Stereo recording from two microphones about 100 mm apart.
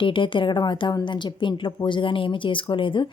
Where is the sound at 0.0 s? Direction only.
55° left (ahead or behind).